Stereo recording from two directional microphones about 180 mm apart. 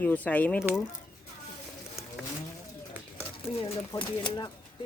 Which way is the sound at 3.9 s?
20° left (ahead or behind).